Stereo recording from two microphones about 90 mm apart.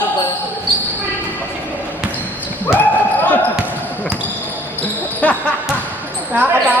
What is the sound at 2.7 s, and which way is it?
Basketball bounce, 20° left (ahead or behind).